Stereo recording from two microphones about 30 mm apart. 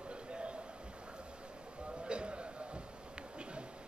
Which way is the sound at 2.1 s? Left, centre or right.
Right.